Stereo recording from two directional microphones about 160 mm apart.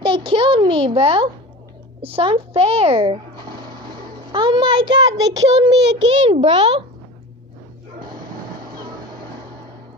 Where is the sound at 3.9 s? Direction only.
30° right (ahead or behind).